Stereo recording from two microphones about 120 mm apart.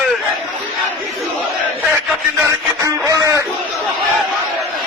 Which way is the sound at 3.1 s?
25° right (ahead or behind).